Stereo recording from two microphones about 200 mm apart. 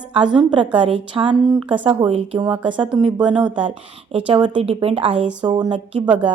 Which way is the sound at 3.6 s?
25° right (ahead or behind).